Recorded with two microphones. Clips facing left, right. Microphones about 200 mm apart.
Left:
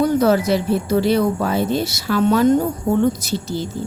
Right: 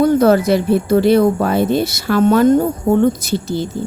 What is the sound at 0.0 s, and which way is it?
Speech, 55° right (ahead or behind).